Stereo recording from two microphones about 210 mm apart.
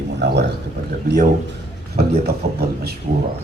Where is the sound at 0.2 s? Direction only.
50° right (ahead or behind).